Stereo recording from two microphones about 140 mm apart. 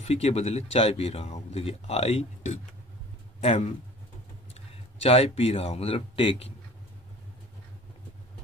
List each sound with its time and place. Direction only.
0.0 s speech: 50° left (ahead or behind)
5.0 s speech: 45° left (ahead or behind)